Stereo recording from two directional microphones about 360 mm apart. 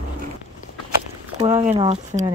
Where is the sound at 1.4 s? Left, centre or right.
Centre.